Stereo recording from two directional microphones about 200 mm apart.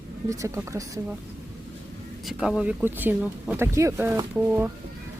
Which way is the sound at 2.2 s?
Centre (ahead or behind).